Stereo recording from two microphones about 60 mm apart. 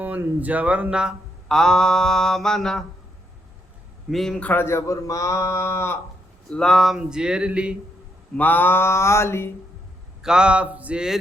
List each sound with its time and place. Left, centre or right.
0.3 s speech: right
1.5 s mantra: centre
4.1 s a man's voice: centre
4.5 s speech: left
4.8 s speech: left
6.5 s mantra: centre
6.9 s speech: centre
8.4 s speech: left
10.2 s speech: centre